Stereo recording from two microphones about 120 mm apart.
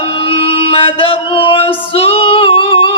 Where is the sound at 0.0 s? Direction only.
50° left (ahead or behind).